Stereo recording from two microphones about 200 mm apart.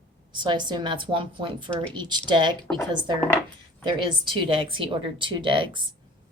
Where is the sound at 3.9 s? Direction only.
25° right (ahead or behind).